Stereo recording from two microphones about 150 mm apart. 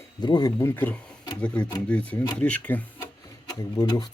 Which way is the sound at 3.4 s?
25° left (ahead or behind).